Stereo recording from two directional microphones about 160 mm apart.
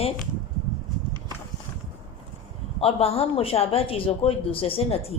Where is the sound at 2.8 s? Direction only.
40° left (ahead or behind).